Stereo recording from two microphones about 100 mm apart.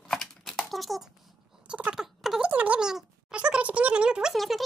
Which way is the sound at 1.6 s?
10° right (ahead or behind).